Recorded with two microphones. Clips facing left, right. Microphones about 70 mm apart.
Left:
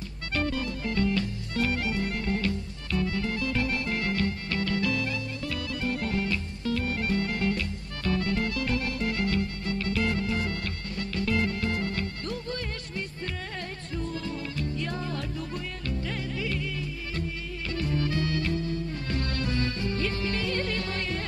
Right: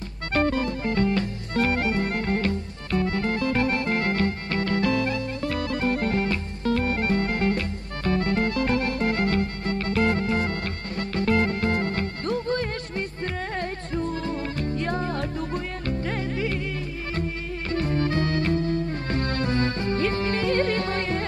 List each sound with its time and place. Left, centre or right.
0.3 s music: right